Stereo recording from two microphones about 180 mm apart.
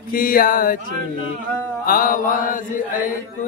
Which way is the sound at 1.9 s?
50° left (ahead or behind).